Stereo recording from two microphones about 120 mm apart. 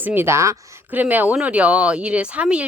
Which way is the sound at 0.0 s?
15° right (ahead or behind).